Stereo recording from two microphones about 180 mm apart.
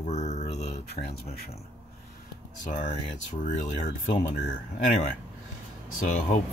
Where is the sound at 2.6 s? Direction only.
45° left (ahead or behind).